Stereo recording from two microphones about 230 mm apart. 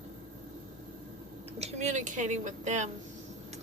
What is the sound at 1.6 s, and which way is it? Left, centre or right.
A woman's voice, right.